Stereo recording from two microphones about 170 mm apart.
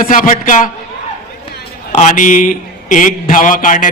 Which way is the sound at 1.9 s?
45° left (ahead or behind).